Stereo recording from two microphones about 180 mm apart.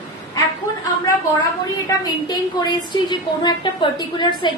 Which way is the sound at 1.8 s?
20° left (ahead or behind).